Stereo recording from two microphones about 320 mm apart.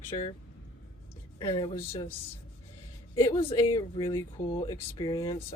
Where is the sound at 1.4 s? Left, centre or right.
Centre.